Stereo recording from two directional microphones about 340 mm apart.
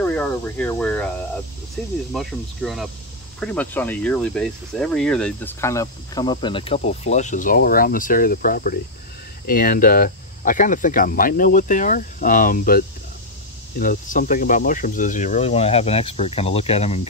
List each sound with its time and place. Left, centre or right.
0.0 s speech: centre